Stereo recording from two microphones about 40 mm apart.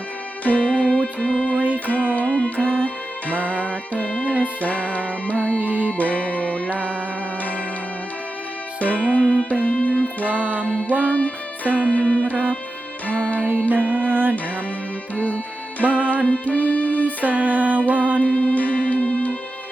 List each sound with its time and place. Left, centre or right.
0.4 s music: left
1.5 s music: right
1.9 s music: left
3.5 s music: left
5.5 s music: right
5.9 s music: left
8.8 s music: left
10.3 s music: right
10.7 s music: left
13.4 s music: right
16.0 s music: left
17.2 s music: right
18.2 s music: left